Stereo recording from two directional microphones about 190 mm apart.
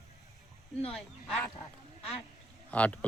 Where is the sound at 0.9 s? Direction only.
5° left (ahead or behind).